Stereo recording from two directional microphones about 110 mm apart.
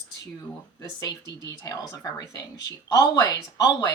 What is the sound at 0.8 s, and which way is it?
Speech, 35° left (ahead or behind).